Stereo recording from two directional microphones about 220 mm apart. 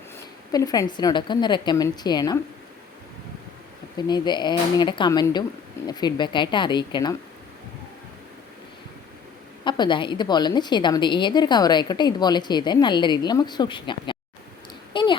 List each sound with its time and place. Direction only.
0.5 s a woman's voice: 15° left (ahead or behind)
3.9 s a woman's voice: 20° left (ahead or behind)
9.6 s a woman's voice: 20° left (ahead or behind)
14.9 s a sound: 20° left (ahead or behind)